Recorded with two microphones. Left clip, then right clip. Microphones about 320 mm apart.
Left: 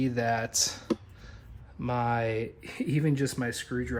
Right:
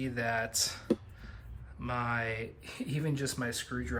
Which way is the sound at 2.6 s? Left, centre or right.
Centre.